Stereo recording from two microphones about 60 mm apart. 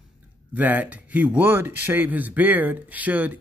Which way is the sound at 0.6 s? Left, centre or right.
Right.